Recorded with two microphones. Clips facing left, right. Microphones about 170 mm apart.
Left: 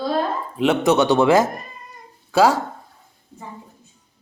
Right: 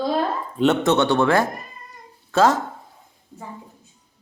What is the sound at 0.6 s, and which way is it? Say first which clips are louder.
A man's voice: left 1 dB; 10° left (ahead or behind).